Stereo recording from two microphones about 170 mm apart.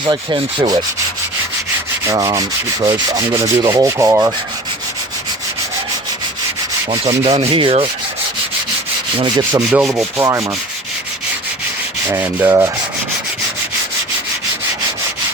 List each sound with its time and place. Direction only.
0.0 s rub: 25° right (ahead or behind)
2.0 s rub: 20° right (ahead or behind)
7.3 s rub: 35° right (ahead or behind)
9.1 s rub: 25° right (ahead or behind)
9.7 s rub: 5° right (ahead or behind)
10.2 s rub: 20° right (ahead or behind)
12.0 s rub: 10° right (ahead or behind)